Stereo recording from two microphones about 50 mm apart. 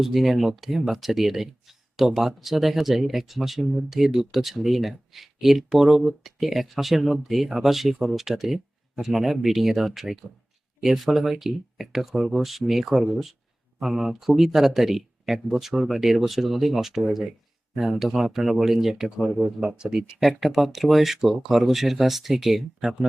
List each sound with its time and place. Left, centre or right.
0.0 s speech: centre
20.2 s speech: centre